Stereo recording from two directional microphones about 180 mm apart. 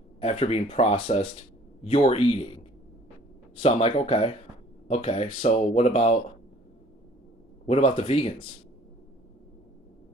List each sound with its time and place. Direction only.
0.2 s speech: 35° left (ahead or behind)
3.6 s speech: 35° left (ahead or behind)
7.6 s speech: 35° left (ahead or behind)